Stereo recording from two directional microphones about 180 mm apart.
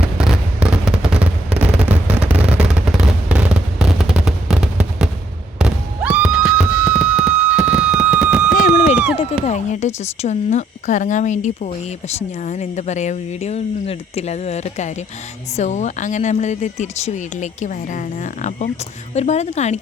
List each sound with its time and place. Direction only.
0.2 s fireworks: 5° right (ahead or behind)
9.1 s speech: 40° left (ahead or behind)